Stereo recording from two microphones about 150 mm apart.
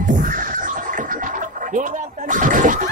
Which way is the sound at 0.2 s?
65° right (ahead or behind).